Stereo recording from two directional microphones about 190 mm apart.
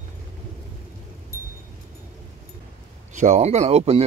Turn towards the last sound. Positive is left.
turn(degrees=-35)  # may be behind; listen again after turning